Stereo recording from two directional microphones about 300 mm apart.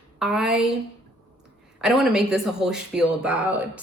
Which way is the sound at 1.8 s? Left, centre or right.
Centre.